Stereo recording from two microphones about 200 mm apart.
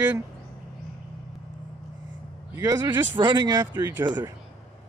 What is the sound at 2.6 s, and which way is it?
Speech, 20° right (ahead or behind).